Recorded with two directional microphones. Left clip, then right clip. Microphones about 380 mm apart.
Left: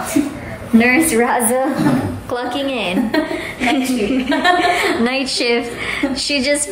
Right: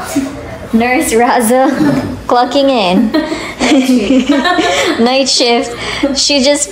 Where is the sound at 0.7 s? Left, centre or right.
Centre.